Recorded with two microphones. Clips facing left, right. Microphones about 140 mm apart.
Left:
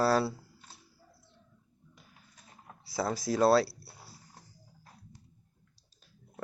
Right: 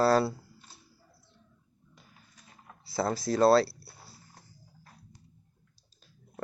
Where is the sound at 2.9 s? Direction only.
5° left (ahead or behind).